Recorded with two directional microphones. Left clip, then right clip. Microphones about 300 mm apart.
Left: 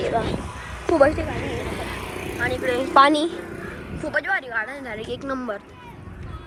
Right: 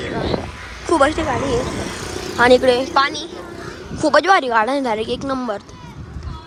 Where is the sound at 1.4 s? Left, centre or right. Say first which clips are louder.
Right 8 dB; right.